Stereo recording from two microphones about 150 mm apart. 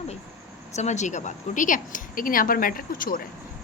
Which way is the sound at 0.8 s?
50° left (ahead or behind).